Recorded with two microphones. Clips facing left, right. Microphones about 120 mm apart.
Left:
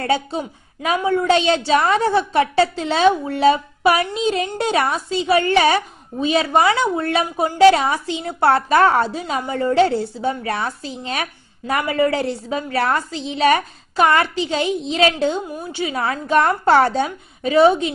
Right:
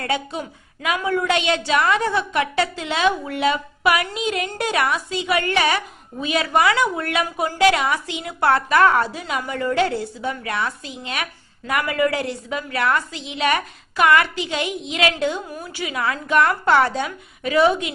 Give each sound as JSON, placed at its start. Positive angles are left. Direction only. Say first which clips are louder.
{"t": 0.0, "sound": "a woman's voice", "louder": "left 4 dB", "side_deg": 30}